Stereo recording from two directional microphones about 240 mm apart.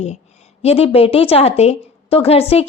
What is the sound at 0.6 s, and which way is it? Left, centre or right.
A woman's voice, left.